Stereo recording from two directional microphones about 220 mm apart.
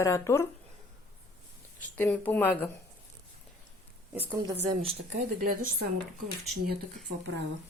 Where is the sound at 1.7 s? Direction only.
5° left (ahead or behind).